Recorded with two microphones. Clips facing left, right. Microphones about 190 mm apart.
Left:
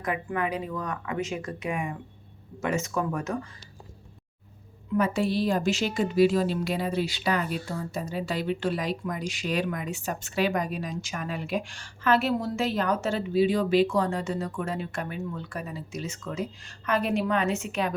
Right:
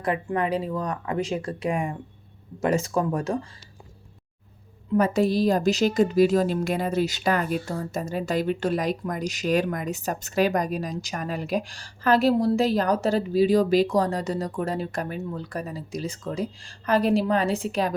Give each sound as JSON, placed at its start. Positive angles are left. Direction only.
{"t": 0.0, "sound": "speech", "side_deg": -30}
{"t": 4.9, "sound": "a woman's voice", "side_deg": -40}